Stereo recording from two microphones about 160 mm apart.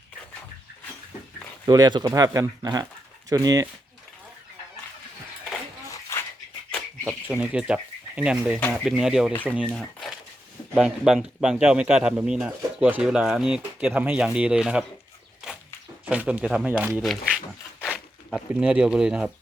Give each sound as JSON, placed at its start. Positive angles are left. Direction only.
{"t": 1.6, "sound": "speech", "side_deg": -25}
{"t": 6.1, "sound": "dog", "side_deg": 15}
{"t": 7.0, "sound": "speech", "side_deg": -10}
{"t": 9.3, "sound": "speech", "side_deg": 10}
{"t": 9.7, "sound": "crumpling", "side_deg": 0}
{"t": 10.8, "sound": "speech", "side_deg": -5}
{"t": 16.0, "sound": "speech", "side_deg": -5}
{"t": 17.0, "sound": "a sound", "side_deg": 0}
{"t": 17.9, "sound": "speech", "side_deg": -5}